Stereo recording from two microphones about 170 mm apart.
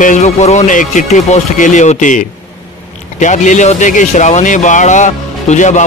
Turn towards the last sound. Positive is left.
turn(degrees=45)  # may be behind; listen again after turning